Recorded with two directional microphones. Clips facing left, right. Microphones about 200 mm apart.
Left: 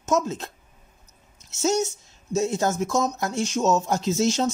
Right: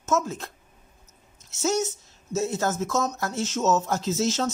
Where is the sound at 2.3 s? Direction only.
15° left (ahead or behind).